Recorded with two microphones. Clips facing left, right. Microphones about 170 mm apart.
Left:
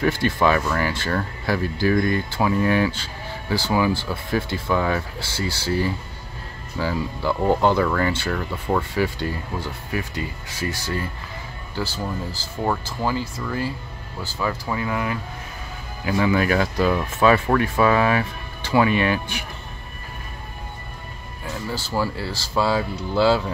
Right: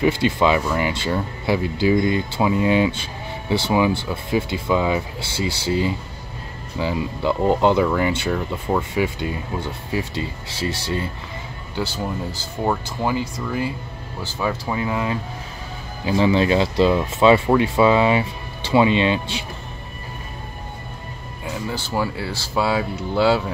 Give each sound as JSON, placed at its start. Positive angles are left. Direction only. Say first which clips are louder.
{"t": 0.0, "sound": "speech", "louder": "right 2 dB", "side_deg": -20}
{"t": 21.5, "sound": "speech", "louder": "right 2 dB", "side_deg": -15}
{"t": 22.0, "sound": "speech", "louder": "right 1 dB", "side_deg": -5}